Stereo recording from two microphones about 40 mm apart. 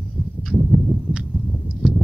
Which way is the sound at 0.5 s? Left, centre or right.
Centre.